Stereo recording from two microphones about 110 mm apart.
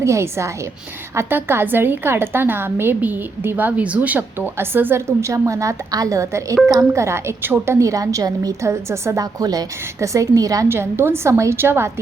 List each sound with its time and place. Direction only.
0.0 s a woman's voice: 25° right (ahead or behind)
10.7 s a woman's voice: 20° right (ahead or behind)